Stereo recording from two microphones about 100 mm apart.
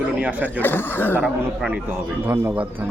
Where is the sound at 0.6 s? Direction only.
20° left (ahead or behind).